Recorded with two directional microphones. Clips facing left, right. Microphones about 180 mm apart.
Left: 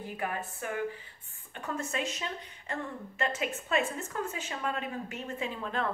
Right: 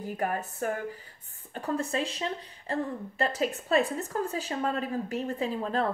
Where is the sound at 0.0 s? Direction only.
40° right (ahead or behind).